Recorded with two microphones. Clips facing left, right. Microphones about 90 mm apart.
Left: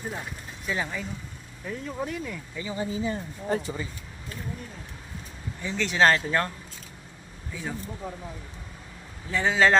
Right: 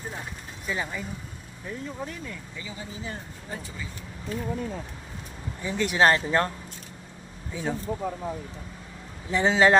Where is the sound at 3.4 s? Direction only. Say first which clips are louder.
Left 11 dB; 70° left (ahead or behind).